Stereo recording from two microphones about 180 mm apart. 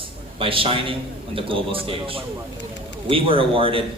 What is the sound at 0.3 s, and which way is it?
A man's voice, 30° right (ahead or behind).